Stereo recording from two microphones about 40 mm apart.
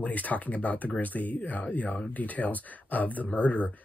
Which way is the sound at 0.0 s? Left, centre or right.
Left.